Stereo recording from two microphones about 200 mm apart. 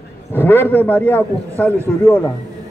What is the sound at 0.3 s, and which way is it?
A man's voice, 10° left (ahead or behind).